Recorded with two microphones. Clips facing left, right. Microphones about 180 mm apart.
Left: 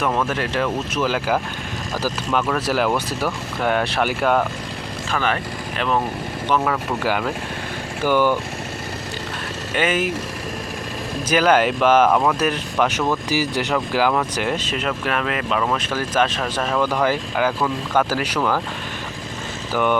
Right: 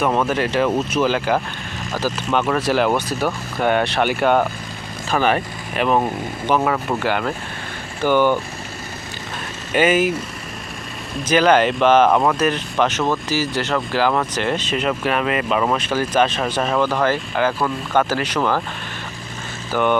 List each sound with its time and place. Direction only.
0.0 s speech: 10° right (ahead or behind)
2.5 s speech: 5° left (ahead or behind)
5.2 s speech: 15° right (ahead or behind)
7.0 s speech: 5° left (ahead or behind)
8.0 s speech: 20° right (ahead or behind)
9.7 s speech: 5° right (ahead or behind)
11.3 s speech: 5° left (ahead or behind)
12.1 s speech: 5° right (ahead or behind)
13.3 s speech: 15° left (ahead or behind); by 16.8 s 5° right (ahead or behind)
16.8 s speech: 10° left (ahead or behind)